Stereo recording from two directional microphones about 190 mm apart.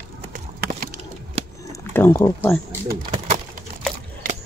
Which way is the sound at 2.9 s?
40° right (ahead or behind).